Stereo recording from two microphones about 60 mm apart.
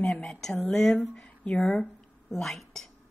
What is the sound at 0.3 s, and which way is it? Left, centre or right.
Speech, centre.